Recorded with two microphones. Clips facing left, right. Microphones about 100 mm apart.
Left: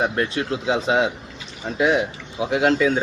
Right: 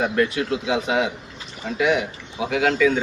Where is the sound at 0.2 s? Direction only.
30° left (ahead or behind).